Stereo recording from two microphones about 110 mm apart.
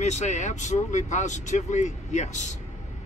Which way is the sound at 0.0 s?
90° left.